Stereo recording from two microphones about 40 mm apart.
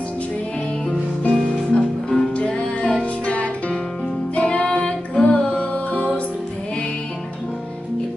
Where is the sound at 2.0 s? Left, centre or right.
Centre.